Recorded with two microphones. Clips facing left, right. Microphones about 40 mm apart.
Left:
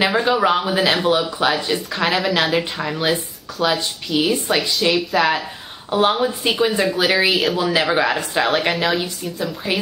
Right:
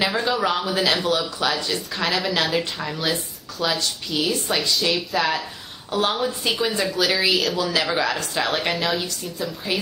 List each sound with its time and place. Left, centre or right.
0.0 s a woman's voice: left
4.6 s a woman's voice: centre
5.9 s a woman's voice: left